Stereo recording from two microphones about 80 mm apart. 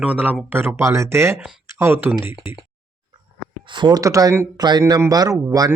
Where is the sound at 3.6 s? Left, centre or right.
Right.